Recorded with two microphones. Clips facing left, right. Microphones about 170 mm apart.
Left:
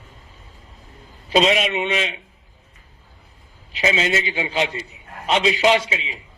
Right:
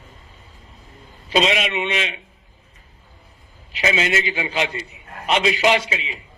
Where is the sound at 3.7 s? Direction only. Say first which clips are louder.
Even; 30° left (ahead or behind).